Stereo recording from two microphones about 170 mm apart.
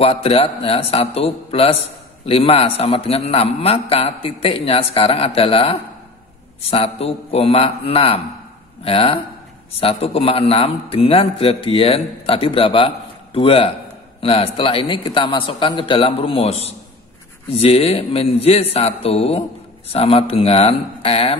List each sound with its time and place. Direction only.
0.0 s a man's voice: 35° left (ahead or behind)